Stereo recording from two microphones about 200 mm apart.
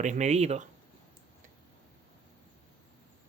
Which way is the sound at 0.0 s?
35° right (ahead or behind).